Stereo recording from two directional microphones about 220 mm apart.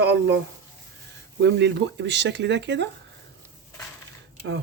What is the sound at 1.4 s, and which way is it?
Speech, 50° right (ahead or behind).